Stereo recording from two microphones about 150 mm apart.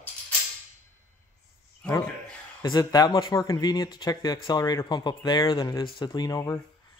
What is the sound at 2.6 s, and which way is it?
Speech, 25° left (ahead or behind).